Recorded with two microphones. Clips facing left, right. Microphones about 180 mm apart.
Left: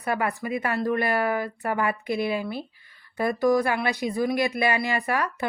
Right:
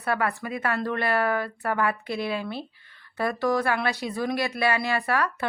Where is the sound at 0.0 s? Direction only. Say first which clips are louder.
Even; 15° left (ahead or behind).